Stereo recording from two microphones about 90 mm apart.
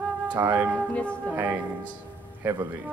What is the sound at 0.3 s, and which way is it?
Music, 20° right (ahead or behind).